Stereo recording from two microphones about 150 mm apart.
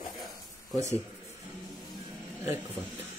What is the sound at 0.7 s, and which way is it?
Speech, 20° right (ahead or behind).